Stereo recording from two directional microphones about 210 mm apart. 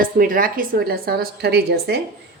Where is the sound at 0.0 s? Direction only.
40° right (ahead or behind).